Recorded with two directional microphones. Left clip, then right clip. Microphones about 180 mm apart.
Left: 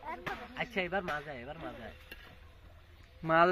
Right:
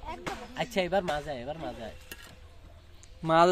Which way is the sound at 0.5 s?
60° right (ahead or behind).